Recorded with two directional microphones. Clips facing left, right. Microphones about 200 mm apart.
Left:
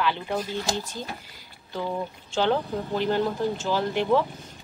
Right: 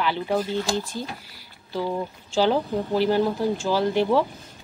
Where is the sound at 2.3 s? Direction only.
10° right (ahead or behind).